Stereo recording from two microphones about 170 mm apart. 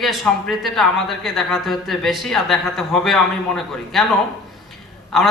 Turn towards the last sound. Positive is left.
turn(degrees=0)  # may be behind; listen again after turning